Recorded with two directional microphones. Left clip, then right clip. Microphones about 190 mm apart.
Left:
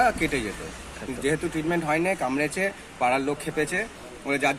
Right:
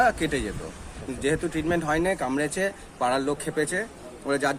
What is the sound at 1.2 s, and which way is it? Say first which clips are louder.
Speech: right 1 dB; 25° right (ahead or behind).